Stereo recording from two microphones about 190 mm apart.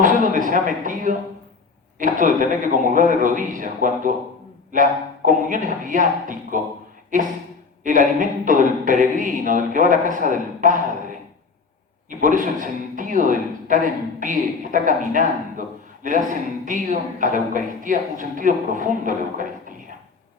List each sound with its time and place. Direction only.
0.0 s a man's voice: 45° right (ahead or behind)
7.9 s a man's voice: 45° right (ahead or behind)
12.0 s a man's voice: 45° right (ahead or behind)